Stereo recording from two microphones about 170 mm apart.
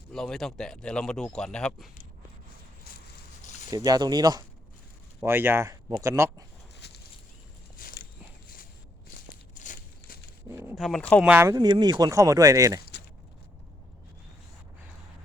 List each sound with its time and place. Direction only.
0.1 s speech: 5° left (ahead or behind)
3.4 s a sound: 45° left (ahead or behind)
3.7 s speech: 20° right (ahead or behind)
6.7 s a sound: 80° left
7.8 s walk: 55° left (ahead or behind)
9.1 s crumpling: 50° left (ahead or behind)
10.5 s speech: 15° right (ahead or behind)
10.8 s speech: centre (ahead or behind)
11.2 s speech: 10° right (ahead or behind)